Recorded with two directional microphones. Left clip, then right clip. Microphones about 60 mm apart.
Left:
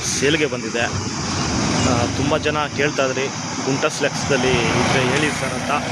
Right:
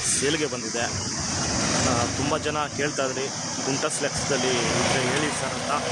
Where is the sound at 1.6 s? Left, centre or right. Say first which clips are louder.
Left 4 dB; centre.